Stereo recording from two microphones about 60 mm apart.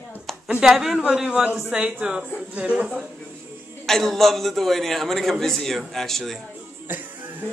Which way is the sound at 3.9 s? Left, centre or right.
Centre.